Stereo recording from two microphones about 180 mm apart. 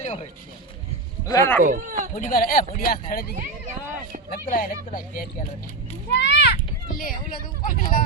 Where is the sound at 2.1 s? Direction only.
45° left (ahead or behind).